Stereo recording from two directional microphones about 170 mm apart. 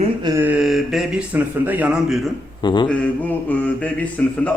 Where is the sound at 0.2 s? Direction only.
25° right (ahead or behind).